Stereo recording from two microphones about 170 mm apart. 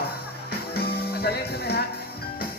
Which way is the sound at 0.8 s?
65° left (ahead or behind).